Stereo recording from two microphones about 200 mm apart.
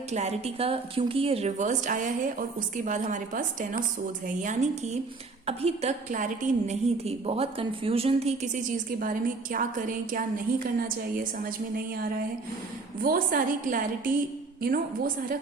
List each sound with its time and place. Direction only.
0.1 s a woman's voice: 35° right (ahead or behind)
13.0 s a woman's voice: 45° right (ahead or behind)